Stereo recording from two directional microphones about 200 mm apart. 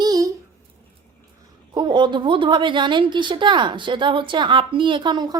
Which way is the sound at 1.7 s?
25° right (ahead or behind).